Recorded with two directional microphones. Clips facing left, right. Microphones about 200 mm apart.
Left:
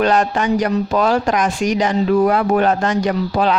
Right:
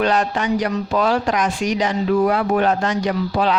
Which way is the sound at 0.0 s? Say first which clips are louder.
Left 3 dB; 50° left (ahead or behind).